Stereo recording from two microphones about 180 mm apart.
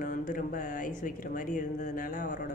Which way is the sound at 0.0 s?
45° left (ahead or behind).